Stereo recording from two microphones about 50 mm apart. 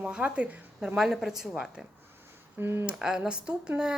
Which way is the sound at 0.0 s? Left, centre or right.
Right.